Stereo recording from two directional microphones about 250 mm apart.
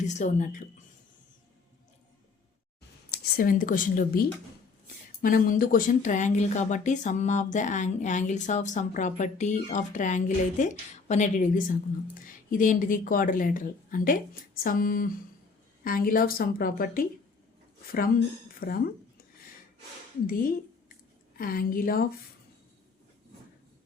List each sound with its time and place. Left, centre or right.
0.0 s speech: left
3.1 s speech: left
18.6 s a sound: left
20.2 s speech: left